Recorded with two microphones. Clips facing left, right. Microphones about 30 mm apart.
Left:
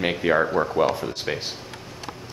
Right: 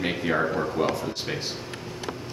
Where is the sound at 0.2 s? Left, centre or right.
Left.